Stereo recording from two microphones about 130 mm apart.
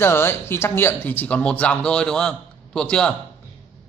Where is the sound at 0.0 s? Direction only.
20° left (ahead or behind).